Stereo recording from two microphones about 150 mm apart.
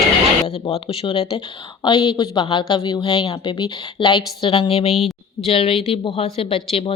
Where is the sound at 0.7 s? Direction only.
35° left (ahead or behind).